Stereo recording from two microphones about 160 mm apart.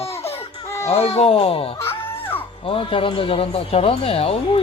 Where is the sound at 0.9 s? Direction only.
40° left (ahead or behind).